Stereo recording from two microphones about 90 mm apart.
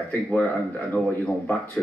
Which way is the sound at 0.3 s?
15° left (ahead or behind).